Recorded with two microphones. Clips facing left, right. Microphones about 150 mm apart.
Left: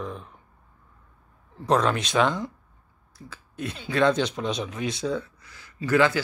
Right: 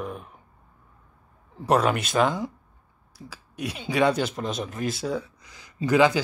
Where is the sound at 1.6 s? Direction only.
10° right (ahead or behind).